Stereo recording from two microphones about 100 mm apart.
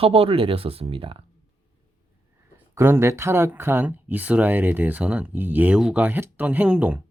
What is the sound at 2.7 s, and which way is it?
Speech, 25° right (ahead or behind).